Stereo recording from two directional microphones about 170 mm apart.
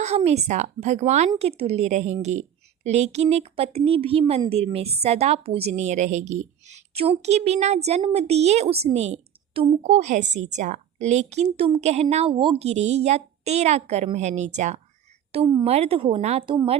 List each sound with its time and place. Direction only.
0.3 s a woman's voice: 40° right (ahead or behind)